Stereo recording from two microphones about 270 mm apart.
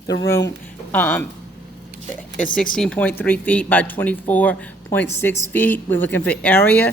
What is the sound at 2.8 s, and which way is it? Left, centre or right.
Speech, centre.